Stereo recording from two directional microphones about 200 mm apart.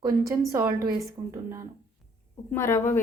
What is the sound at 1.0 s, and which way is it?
Speech, 15° right (ahead or behind).